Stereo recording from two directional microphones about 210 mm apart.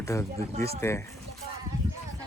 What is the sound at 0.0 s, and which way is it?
Speech, 15° left (ahead or behind).